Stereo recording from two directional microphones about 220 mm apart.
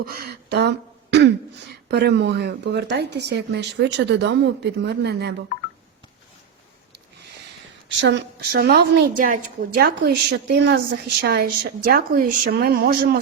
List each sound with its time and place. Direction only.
0.0 s a woman's voice: 45° right (ahead or behind)
7.9 s a woman's voice: 50° right (ahead or behind)